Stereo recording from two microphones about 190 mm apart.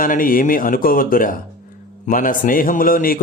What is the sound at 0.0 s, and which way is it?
Speech, 45° left (ahead or behind).